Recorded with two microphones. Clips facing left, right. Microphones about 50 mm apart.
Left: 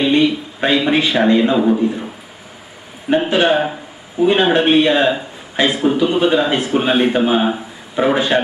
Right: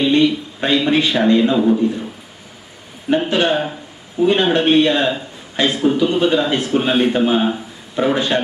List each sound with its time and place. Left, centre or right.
0.0 s a man's voice: centre
3.1 s a man's voice: centre